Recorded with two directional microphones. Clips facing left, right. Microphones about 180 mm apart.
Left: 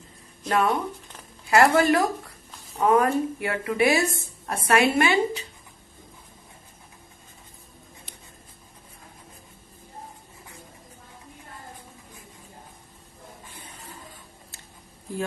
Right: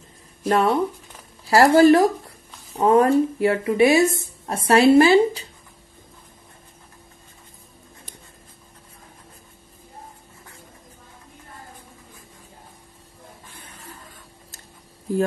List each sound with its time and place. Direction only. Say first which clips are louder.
0.5 s a woman's voice: right 4 dB; 30° right (ahead or behind)